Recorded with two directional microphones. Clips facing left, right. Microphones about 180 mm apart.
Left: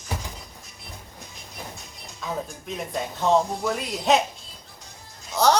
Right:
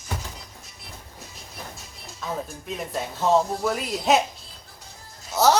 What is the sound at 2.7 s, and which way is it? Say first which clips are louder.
A woman's voice: right 1 dB; centre (ahead or behind).